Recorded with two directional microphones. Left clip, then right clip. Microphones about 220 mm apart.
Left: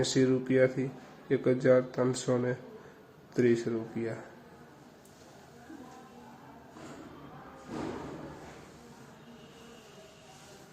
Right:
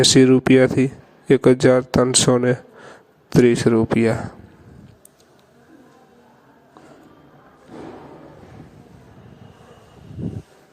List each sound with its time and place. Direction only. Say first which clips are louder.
0.0 s a man's voice: right 15 dB; 45° right (ahead or behind)